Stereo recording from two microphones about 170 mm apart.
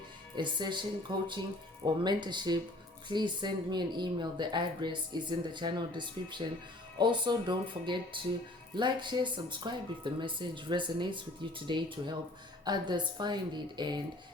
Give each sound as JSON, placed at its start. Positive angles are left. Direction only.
{"t": 0.3, "sound": "speech", "side_deg": -25}